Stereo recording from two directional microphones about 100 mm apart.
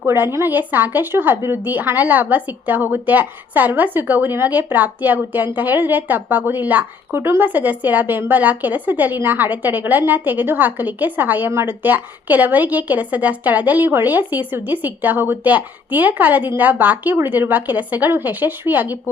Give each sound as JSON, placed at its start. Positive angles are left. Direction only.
{"t": 0.0, "sound": "speech", "side_deg": -20}